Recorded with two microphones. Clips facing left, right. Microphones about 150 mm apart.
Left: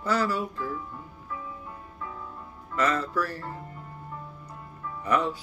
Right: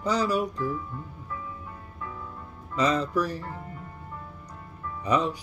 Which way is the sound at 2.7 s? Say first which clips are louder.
Right 2 dB; 15° right (ahead or behind).